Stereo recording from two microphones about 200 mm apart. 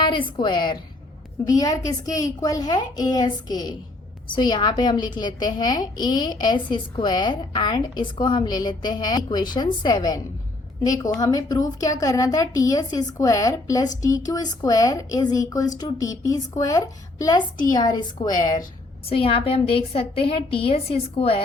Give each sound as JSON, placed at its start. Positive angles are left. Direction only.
{"t": 0.0, "sound": "a woman's voice", "side_deg": 25}